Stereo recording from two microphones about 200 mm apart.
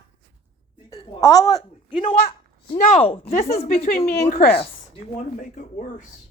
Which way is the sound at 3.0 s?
30° left (ahead or behind).